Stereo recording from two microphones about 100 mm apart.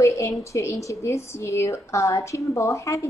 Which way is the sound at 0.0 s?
30° left (ahead or behind).